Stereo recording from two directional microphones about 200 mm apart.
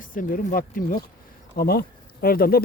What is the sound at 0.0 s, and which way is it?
Speech, 40° left (ahead or behind).